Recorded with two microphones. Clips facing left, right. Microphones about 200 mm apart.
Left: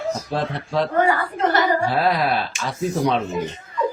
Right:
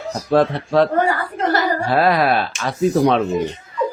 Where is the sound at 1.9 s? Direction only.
65° right (ahead or behind).